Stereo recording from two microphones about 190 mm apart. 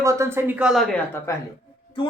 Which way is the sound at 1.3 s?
15° left (ahead or behind).